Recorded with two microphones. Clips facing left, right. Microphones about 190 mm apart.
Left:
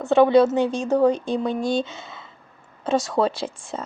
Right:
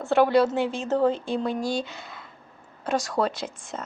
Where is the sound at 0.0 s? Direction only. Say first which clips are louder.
Left 4 dB; 20° left (ahead or behind).